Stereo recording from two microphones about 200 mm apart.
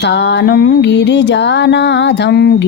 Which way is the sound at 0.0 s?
60° left (ahead or behind).